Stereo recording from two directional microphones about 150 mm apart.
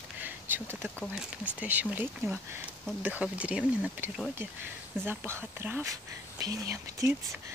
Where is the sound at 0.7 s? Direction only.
10° left (ahead or behind).